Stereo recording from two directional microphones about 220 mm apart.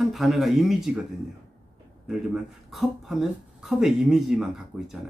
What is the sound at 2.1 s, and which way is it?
A man's voice, centre (ahead or behind).